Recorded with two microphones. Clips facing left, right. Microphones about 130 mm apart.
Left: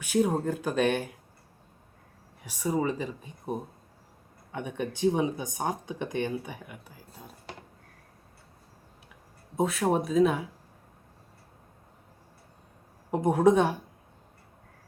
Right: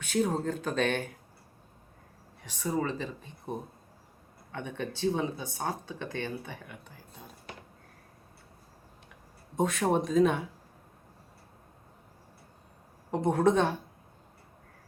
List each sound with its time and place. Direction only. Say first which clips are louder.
0.0 s speech: left 3 dB; 10° left (ahead or behind)
2.4 s speech: left 3 dB; 10° left (ahead or behind)
9.6 s speech: left 1 dB; 5° left (ahead or behind)
13.1 s speech: left 3 dB; 10° left (ahead or behind)